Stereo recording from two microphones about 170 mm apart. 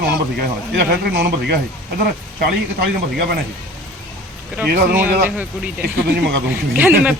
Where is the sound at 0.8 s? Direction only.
70° right (ahead or behind).